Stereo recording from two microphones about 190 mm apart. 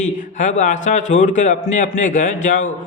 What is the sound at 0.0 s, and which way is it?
A man's voice, 40° left (ahead or behind).